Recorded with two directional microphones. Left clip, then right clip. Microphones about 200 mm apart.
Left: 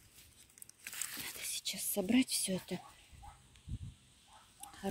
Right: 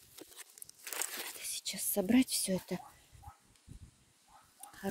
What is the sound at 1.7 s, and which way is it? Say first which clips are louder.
Speech: right 3 dB; 25° right (ahead or behind).